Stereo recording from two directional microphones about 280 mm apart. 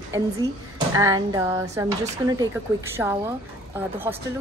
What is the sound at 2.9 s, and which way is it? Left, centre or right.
Speech, centre.